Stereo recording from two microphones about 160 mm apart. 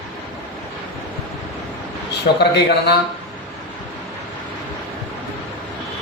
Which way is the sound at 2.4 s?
90° left.